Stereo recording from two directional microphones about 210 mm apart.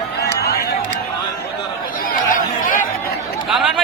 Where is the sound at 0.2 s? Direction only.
50° left (ahead or behind).